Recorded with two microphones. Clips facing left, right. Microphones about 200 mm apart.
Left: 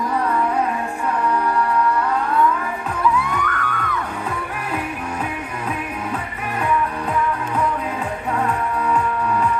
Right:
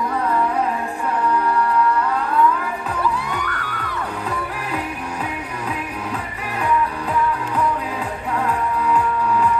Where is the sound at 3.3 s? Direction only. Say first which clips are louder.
Left 3 dB; 35° right (ahead or behind).